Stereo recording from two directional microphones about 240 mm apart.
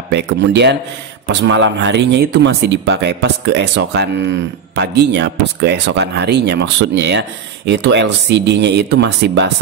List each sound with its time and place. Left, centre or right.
0.1 s speech: right